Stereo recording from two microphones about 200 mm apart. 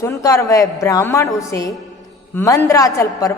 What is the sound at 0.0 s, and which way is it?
A woman's voice, 15° left (ahead or behind).